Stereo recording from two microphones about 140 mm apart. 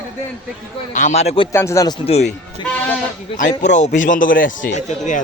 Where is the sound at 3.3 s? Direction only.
60° left (ahead or behind).